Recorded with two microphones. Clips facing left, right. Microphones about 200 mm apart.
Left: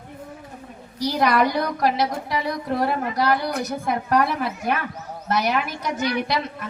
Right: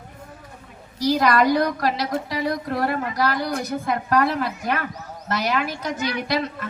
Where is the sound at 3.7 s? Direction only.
60° right (ahead or behind).